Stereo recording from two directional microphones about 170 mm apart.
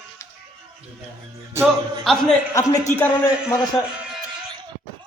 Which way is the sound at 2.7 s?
15° left (ahead or behind).